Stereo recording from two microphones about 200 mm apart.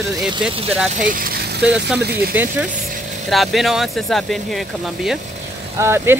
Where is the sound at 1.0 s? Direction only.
45° right (ahead or behind).